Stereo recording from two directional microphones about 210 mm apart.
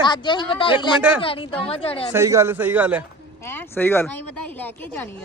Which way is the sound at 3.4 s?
10° left (ahead or behind).